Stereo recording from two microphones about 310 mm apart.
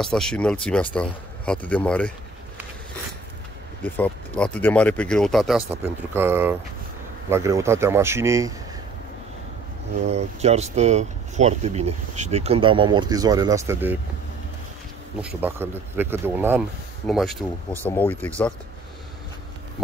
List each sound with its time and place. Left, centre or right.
0.0 s speech: centre
3.8 s a man's voice: centre
10.0 s speech: right
15.2 s speech: centre